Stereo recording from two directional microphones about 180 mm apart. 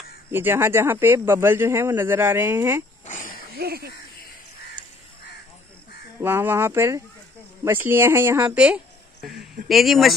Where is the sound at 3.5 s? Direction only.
60° right (ahead or behind).